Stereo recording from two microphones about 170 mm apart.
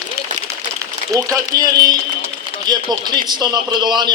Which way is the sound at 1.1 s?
20° right (ahead or behind).